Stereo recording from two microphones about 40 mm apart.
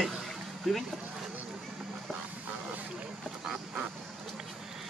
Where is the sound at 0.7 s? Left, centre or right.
Centre.